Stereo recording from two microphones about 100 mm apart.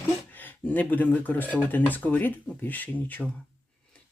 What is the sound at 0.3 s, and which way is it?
Speech, 15° left (ahead or behind).